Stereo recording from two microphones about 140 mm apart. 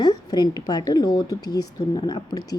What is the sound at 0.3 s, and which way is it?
A woman's voice, 30° left (ahead or behind).